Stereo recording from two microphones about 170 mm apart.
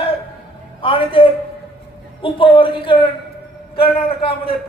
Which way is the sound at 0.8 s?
30° left (ahead or behind).